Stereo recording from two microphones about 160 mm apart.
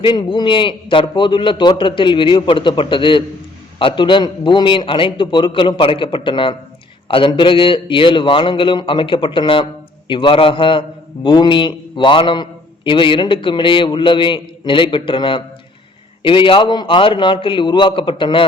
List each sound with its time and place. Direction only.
0.0 s a man's voice: 30° left (ahead or behind)